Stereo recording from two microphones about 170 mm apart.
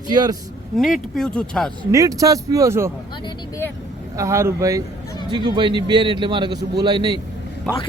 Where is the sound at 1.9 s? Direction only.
20° right (ahead or behind).